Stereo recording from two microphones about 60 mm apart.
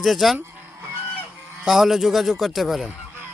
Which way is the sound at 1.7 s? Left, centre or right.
Centre.